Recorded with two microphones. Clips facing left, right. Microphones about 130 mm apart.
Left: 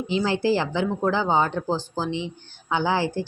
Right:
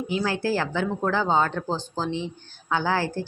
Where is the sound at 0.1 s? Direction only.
20° left (ahead or behind).